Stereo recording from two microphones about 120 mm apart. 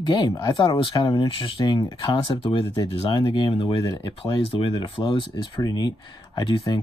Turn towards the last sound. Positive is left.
turn(degrees=40)  # may be behind; listen again after turning